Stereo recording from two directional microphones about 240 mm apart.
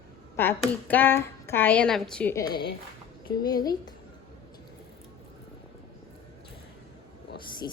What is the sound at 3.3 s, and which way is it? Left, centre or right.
Speech, centre.